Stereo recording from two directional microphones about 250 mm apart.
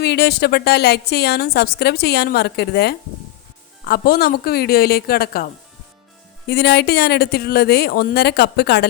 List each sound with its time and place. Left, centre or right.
0.0 s a woman's voice: left
6.5 s a woman's voice: left